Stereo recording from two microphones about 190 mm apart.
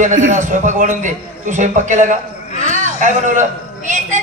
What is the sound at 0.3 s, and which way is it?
A man's voice, 40° right (ahead or behind).